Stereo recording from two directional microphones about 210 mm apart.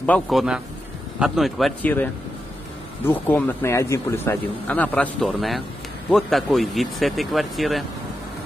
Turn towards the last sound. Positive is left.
turn(degrees=0)  # may be behind; listen again after turning